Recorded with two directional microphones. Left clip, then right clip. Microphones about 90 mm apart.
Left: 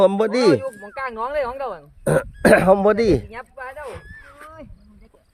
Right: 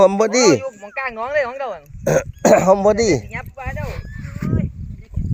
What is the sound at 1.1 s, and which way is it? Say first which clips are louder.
Speech: right 3 dB; 55° left (ahead or behind).